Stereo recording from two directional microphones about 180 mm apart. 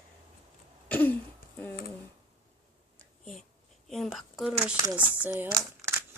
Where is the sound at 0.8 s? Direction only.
10° left (ahead or behind).